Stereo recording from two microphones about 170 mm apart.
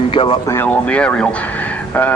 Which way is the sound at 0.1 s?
30° left (ahead or behind).